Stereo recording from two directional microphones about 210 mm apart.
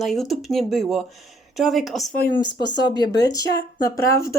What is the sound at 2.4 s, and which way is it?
Speech, 20° left (ahead or behind).